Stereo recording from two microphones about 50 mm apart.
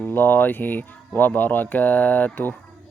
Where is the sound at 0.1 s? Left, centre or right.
Left.